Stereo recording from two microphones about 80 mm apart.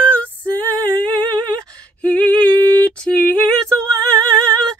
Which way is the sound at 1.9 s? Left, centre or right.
Centre.